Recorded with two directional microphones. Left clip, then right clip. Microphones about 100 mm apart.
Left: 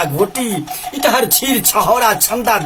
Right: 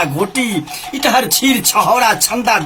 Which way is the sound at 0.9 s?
45° left (ahead or behind).